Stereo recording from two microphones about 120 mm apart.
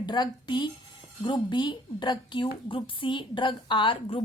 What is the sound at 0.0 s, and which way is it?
A woman's voice, 35° left (ahead or behind).